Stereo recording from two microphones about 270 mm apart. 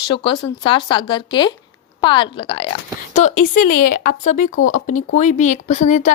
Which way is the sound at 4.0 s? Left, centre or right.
Left.